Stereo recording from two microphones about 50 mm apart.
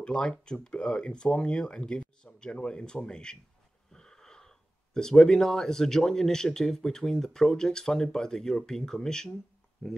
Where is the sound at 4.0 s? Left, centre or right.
Centre.